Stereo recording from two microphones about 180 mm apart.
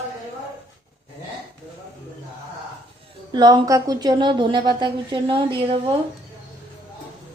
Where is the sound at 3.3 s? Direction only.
25° right (ahead or behind).